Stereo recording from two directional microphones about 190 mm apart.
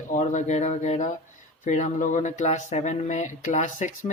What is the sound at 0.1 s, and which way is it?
Speech, 40° left (ahead or behind).